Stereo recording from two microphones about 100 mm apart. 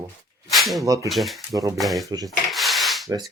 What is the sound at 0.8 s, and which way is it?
Speech, 35° right (ahead or behind).